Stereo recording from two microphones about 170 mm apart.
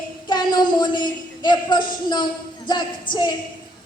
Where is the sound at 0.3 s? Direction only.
25° left (ahead or behind).